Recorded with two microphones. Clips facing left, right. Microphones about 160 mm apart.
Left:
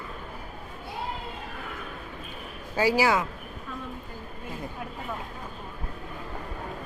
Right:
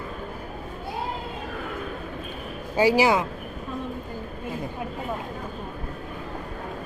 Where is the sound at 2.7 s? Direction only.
15° right (ahead or behind).